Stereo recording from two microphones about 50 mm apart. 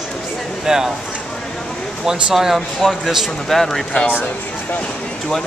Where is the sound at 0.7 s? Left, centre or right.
Centre.